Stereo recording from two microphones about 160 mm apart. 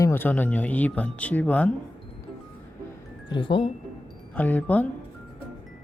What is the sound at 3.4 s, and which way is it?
Speech, 30° left (ahead or behind).